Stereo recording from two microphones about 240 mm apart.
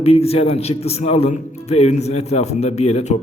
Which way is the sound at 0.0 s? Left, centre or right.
Left.